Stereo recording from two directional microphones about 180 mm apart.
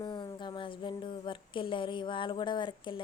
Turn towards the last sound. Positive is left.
turn(degrees=25)  # may be behind; listen again after turning